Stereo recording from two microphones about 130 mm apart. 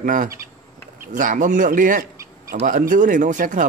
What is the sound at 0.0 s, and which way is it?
Speech, 90° right.